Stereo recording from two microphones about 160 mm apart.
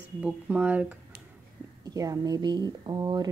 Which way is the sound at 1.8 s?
20° right (ahead or behind).